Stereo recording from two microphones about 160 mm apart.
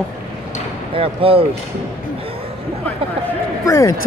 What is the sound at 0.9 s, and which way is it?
Speech, 35° right (ahead or behind).